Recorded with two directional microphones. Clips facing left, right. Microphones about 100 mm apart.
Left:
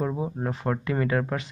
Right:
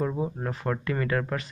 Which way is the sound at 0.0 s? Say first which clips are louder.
Left 1 dB; 10° left (ahead or behind).